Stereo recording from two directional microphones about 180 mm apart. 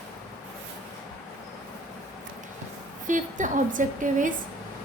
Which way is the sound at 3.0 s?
45° right (ahead or behind).